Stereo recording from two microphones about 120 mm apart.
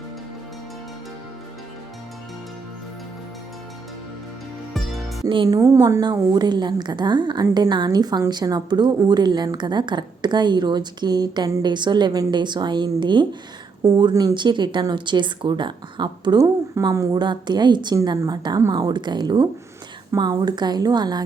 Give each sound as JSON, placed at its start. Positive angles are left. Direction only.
{"t": 4.7, "sound": "music", "side_deg": 0}
{"t": 5.5, "sound": "a woman's voice", "side_deg": -25}
{"t": 6.0, "sound": "a woman's voice", "side_deg": -35}
{"t": 13.8, "sound": "a woman's voice", "side_deg": -30}
{"t": 16.8, "sound": "a woman's voice", "side_deg": -25}